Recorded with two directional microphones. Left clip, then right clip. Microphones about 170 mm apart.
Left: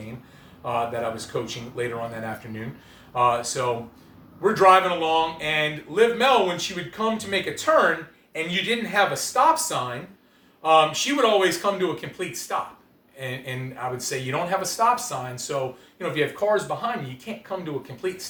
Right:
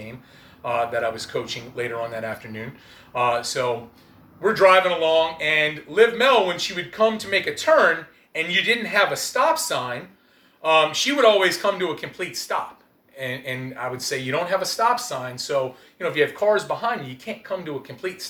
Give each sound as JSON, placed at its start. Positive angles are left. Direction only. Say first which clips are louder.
{"t": 0.6, "sound": "speech", "louder": "right 3 dB", "side_deg": 15}